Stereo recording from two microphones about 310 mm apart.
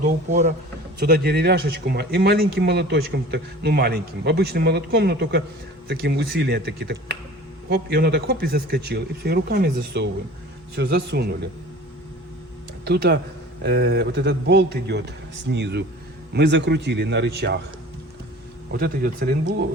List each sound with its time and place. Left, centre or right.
0.0 s a man's voice: right
12.8 s a man's voice: right
18.7 s a man's voice: right